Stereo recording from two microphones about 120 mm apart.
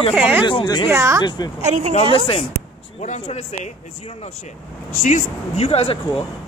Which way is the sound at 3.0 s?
70° left (ahead or behind).